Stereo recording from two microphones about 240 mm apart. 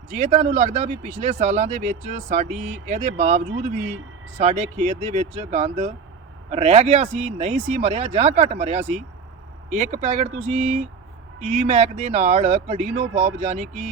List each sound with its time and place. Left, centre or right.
0.1 s speech: right